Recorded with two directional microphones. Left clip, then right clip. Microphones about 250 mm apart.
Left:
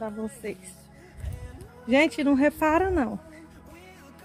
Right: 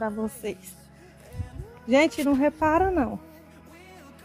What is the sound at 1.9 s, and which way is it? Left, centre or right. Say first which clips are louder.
Speech: right 1 dB; centre.